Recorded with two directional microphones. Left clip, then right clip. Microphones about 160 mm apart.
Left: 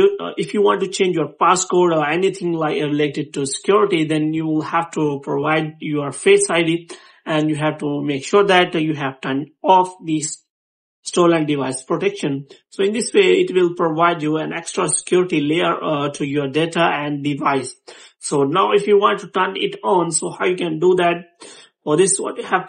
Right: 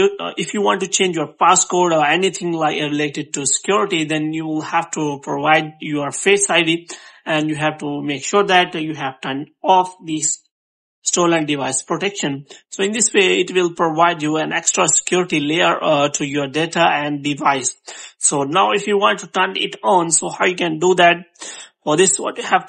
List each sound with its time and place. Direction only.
0.0 s speech: 25° right (ahead or behind)
8.5 s a woman's voice: centre (ahead or behind); by 22.6 s 30° right (ahead or behind)